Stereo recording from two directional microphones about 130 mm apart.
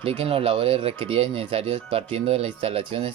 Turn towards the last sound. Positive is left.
turn(degrees=-45)  # may be behind; listen again after turning